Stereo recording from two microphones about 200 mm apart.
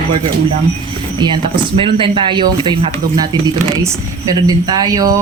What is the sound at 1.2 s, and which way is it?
Speech, 20° right (ahead or behind).